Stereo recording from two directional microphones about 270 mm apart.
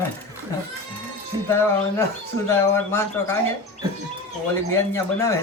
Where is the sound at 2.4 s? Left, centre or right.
Centre.